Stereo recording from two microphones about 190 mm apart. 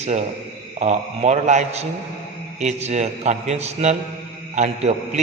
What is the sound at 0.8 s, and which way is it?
A man's voice, 35° right (ahead or behind).